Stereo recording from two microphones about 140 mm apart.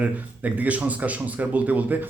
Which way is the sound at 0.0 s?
10° right (ahead or behind).